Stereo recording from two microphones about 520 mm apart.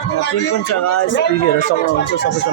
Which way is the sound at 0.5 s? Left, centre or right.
Left.